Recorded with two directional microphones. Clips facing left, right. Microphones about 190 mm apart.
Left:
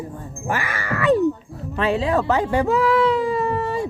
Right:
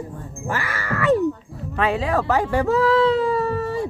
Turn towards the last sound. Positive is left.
turn(degrees=15)  # may be behind; listen again after turning